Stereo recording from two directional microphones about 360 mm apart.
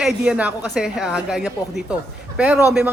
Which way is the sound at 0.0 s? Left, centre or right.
Centre.